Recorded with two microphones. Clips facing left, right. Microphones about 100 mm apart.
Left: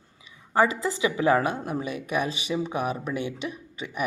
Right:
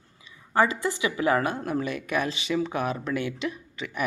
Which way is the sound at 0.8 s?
25° left (ahead or behind).